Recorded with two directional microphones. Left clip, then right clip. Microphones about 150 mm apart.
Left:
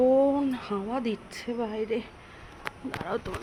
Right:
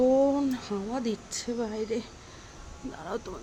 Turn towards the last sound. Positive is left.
turn(degrees=0)  # may be behind; listen again after turning